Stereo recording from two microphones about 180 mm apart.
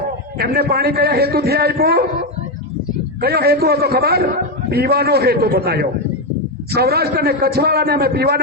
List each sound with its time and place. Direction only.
0.3 s a man's voice: 60° right (ahead or behind)
3.2 s a man's voice: 60° right (ahead or behind)